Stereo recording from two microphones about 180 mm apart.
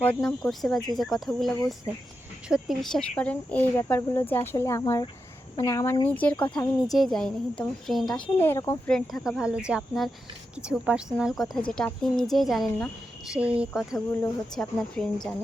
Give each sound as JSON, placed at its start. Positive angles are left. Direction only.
{"t": 0.0, "sound": "a woman's voice", "side_deg": 5}
{"t": 1.5, "sound": "speech", "side_deg": 20}
{"t": 2.5, "sound": "a woman's voice", "side_deg": 0}
{"t": 8.9, "sound": "a woman's voice", "side_deg": 5}
{"t": 13.9, "sound": "speech", "side_deg": 15}
{"t": 14.5, "sound": "a woman's voice", "side_deg": 5}